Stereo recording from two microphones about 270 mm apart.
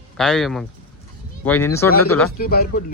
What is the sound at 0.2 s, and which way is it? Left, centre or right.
Speech, centre.